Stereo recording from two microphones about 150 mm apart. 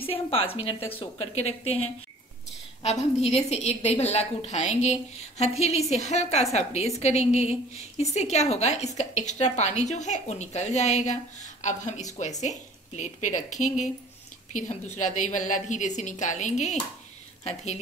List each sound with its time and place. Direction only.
0.0 s a woman's voice: 40° left (ahead or behind)
2.8 s a woman's voice: 45° left (ahead or behind)
15.0 s a woman's voice: 55° left (ahead or behind)